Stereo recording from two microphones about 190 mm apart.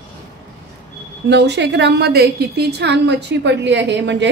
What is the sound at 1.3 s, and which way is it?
A woman's voice, 65° right (ahead or behind).